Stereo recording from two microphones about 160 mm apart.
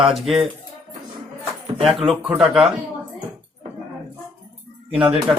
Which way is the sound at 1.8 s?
Centre (ahead or behind).